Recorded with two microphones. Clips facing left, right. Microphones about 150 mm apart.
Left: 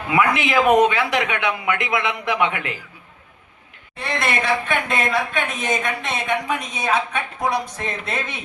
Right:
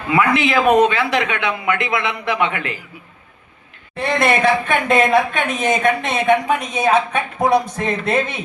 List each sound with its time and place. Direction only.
0.1 s speech: 15° left (ahead or behind)
3.9 s speech: 50° right (ahead or behind)